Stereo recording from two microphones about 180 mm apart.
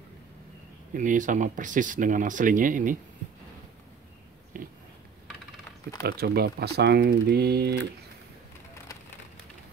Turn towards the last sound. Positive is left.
turn(degrees=-65)  # may be behind; listen again after turning